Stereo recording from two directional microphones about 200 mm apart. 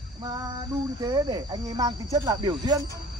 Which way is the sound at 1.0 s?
20° right (ahead or behind).